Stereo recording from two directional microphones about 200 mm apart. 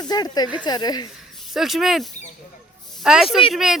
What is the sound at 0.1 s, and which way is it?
Speech, 20° left (ahead or behind).